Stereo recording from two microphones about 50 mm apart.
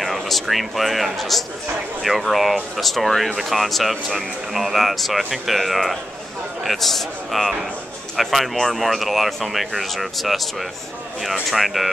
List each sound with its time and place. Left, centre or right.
0.0 s speech: centre
11.5 s speech: centre